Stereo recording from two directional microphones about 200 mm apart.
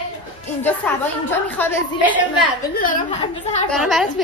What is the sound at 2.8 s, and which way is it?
Speech, 40° left (ahead or behind).